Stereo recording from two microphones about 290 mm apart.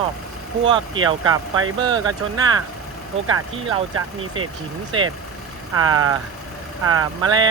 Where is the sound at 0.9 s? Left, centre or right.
Right.